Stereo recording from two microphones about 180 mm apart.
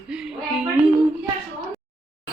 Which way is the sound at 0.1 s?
5° right (ahead or behind).